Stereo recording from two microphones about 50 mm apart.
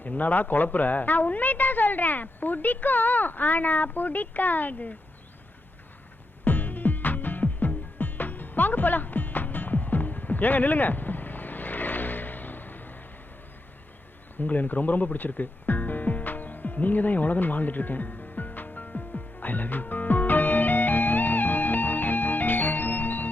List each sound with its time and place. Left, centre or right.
0.0 s a woman's voice: left
6.4 s music: left
14.3 s music: left